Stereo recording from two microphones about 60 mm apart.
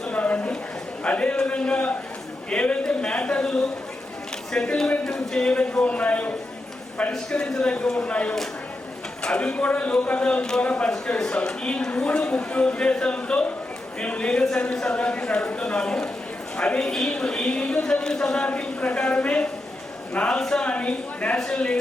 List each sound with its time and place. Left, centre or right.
0.1 s a sound: left
1.0 s speech: left
7.1 s speech: centre
16.8 s speech: centre
21.3 s speech: centre